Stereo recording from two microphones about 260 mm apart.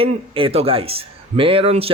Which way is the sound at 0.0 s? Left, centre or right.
Right.